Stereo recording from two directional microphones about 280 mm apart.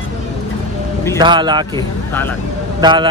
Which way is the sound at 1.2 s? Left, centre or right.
Centre.